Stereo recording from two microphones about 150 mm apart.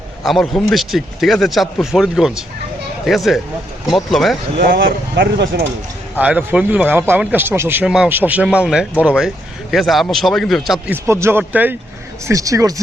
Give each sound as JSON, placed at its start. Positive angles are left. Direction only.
{"t": 0.3, "sound": "speech", "side_deg": 0}
{"t": 4.7, "sound": "speech", "side_deg": -75}
{"t": 6.1, "sound": "a man's voice", "side_deg": -10}
{"t": 10.8, "sound": "a man's voice", "side_deg": -15}